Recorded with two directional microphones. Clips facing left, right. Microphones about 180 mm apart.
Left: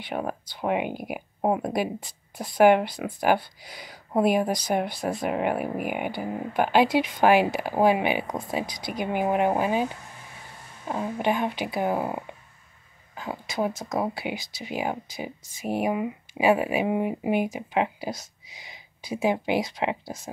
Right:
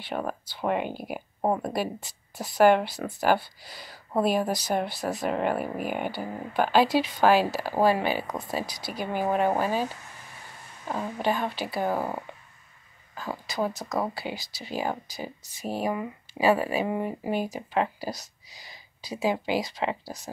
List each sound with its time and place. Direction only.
0.1 s speech: 15° left (ahead or behind)